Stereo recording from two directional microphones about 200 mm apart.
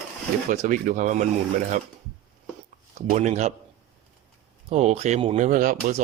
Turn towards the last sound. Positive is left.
turn(degrees=-40)  # may be behind; listen again after turning